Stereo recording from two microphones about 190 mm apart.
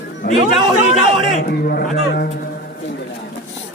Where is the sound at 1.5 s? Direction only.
55° left (ahead or behind).